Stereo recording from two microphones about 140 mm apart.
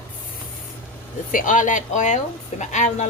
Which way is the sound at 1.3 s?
75° left (ahead or behind).